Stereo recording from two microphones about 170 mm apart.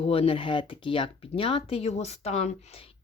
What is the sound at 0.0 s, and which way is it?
Speech, 35° left (ahead or behind).